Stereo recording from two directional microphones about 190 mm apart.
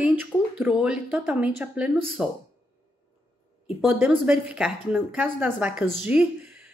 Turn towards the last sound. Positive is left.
turn(degrees=-5)  # may be behind; listen again after turning